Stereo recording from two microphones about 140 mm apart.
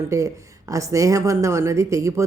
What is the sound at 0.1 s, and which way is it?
Speech, 25° right (ahead or behind).